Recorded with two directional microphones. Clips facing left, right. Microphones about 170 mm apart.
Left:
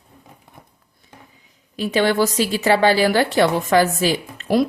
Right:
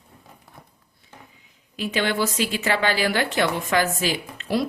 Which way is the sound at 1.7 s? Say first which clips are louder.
Left 6 dB; 35° left (ahead or behind).